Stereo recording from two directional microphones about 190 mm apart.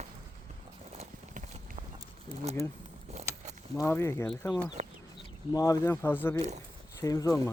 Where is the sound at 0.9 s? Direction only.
35° right (ahead or behind).